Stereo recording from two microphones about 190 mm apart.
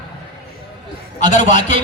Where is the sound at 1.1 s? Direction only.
40° left (ahead or behind).